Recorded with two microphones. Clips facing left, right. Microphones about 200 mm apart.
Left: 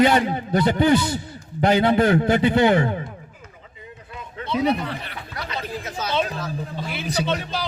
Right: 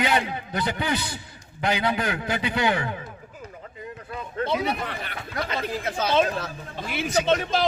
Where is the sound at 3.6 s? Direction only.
50° right (ahead or behind).